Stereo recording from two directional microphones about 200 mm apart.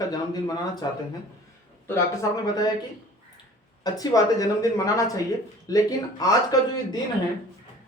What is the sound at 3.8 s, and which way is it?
A man's voice, 20° left (ahead or behind).